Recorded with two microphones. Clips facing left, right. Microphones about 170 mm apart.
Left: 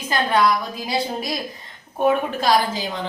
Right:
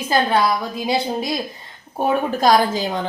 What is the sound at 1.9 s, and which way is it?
A woman's voice, 40° right (ahead or behind).